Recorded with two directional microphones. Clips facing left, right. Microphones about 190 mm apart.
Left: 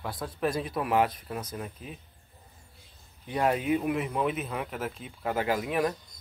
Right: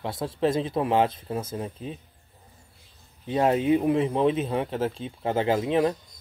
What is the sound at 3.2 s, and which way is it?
Speech, 25° right (ahead or behind).